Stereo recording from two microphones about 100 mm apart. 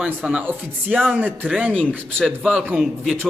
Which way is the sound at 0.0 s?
15° right (ahead or behind).